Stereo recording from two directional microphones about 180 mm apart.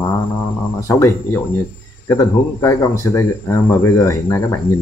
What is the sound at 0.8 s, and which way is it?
Speech, 15° left (ahead or behind).